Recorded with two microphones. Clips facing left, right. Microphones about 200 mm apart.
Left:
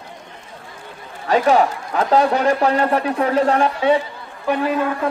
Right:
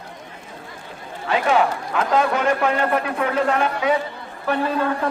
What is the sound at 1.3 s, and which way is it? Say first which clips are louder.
A man's voice: left 4 dB; 40° left (ahead or behind).